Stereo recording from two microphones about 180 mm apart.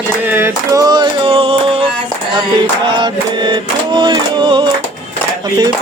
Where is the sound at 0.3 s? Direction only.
10° right (ahead or behind); by 1.9 s 30° right (ahead or behind).